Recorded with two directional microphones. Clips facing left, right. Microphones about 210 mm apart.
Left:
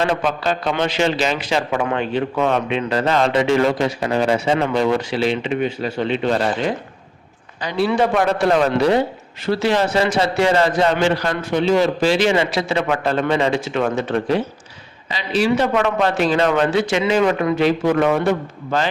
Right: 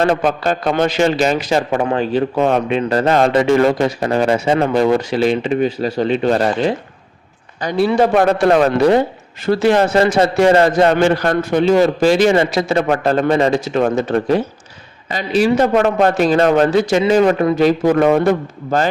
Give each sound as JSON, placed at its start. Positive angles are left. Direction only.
{"t": 0.0, "sound": "a man's voice", "side_deg": -45}
{"t": 7.6, "sound": "a man's voice", "side_deg": -45}